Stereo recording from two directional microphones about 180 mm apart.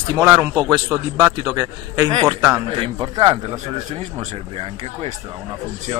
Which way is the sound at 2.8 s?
30° right (ahead or behind).